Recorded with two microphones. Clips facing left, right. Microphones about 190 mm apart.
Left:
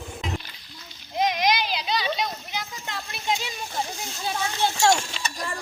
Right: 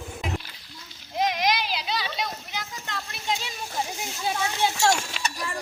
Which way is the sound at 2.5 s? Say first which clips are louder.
Left 1 dB; 20° left (ahead or behind).